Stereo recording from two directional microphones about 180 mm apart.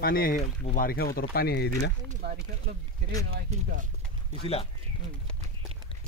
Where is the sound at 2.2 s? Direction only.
65° right (ahead or behind).